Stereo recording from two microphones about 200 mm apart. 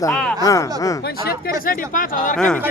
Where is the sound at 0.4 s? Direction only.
15° left (ahead or behind).